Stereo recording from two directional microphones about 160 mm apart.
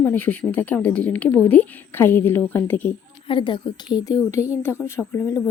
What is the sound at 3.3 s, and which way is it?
Speech, 30° left (ahead or behind).